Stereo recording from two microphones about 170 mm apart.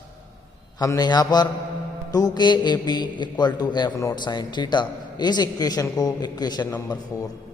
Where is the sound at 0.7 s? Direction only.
20° left (ahead or behind).